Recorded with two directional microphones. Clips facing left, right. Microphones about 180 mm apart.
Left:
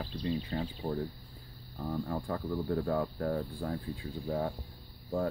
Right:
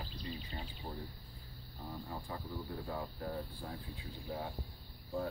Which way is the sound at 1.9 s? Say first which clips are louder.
Left 10 dB; 65° left (ahead or behind).